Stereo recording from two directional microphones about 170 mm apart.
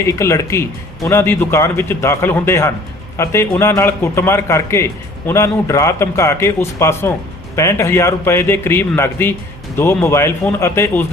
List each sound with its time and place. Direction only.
0.0 s a man's voice: 15° left (ahead or behind)